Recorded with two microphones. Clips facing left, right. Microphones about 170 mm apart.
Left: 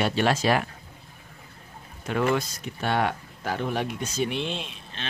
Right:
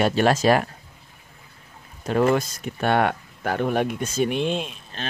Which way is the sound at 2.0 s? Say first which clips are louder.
Right 5 dB; 40° right (ahead or behind).